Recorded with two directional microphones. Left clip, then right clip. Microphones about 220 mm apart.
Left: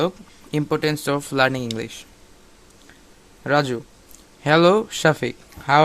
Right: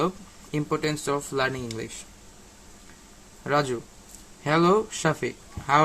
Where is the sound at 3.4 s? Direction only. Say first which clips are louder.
Left 5 dB; 30° left (ahead or behind).